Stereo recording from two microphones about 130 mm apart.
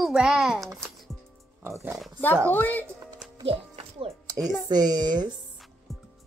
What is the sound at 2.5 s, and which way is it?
Speech, 15° left (ahead or behind).